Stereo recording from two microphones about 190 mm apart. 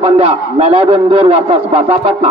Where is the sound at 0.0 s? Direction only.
35° right (ahead or behind).